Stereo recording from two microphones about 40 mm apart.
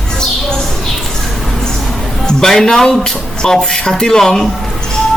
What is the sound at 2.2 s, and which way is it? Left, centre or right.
Speech, centre.